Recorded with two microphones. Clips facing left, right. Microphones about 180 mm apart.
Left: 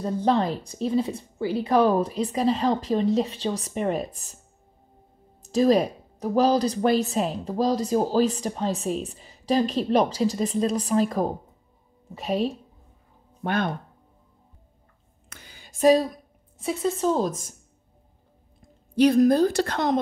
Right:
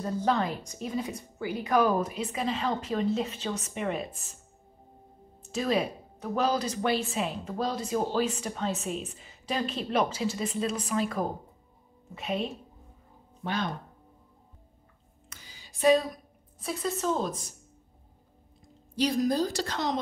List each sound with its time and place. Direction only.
0.0 s speech: 30° left (ahead or behind)
5.4 s speech: 35° left (ahead or behind)
13.4 s speech: 55° left (ahead or behind)
15.2 s a sound: 55° left (ahead or behind); by 16.1 s 40° left (ahead or behind)
16.5 s speech: 25° left (ahead or behind); by 17.6 s 45° left (ahead or behind)
18.9 s a woman's voice: 55° left (ahead or behind)